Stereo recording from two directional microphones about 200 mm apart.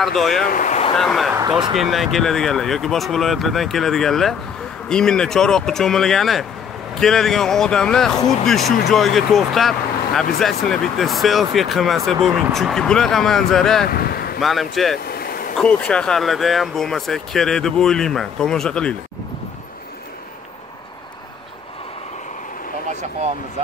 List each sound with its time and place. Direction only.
0.0 s speech: centre (ahead or behind)
0.5 s speech: 40° left (ahead or behind)
0.9 s speech: centre (ahead or behind)
1.3 s speech: 15° right (ahead or behind)
1.8 s speech: centre (ahead or behind)
13.8 s vehicle: 50° left (ahead or behind)
14.4 s speech: centre (ahead or behind)
15.0 s vehicle: 50° left (ahead or behind)
15.5 s speech: 5° left (ahead or behind)